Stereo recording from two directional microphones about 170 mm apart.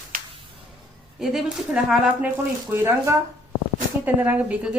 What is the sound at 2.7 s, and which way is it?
A woman's voice, 15° right (ahead or behind).